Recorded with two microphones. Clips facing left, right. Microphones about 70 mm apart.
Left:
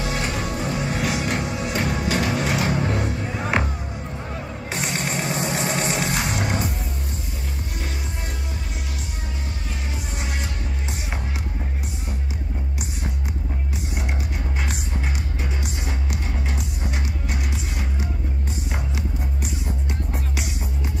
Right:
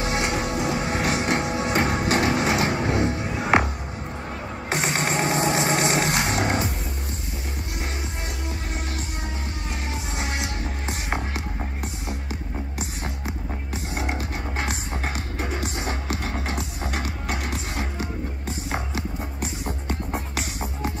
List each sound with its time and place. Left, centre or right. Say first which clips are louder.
0.0 s music: right 1 dB; right
1.4 s music: right 2 dB; right
1.7 s music: right 2 dB; right
4.6 s music: right 3 dB; right
5.5 s music: right 3 dB; right
5.8 s music: right 2 dB; right
15.0 s music: right 1 dB; right
16.1 s music: right 2 dB; right
20.1 s music: right 1 dB; right